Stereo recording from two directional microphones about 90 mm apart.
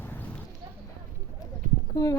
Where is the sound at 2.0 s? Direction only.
40° left (ahead or behind).